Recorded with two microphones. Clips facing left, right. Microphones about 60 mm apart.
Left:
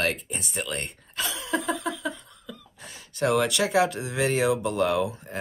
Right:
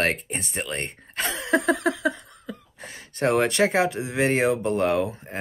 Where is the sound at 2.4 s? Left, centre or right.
Right.